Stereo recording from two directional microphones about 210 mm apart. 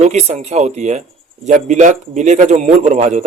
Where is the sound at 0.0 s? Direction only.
35° right (ahead or behind).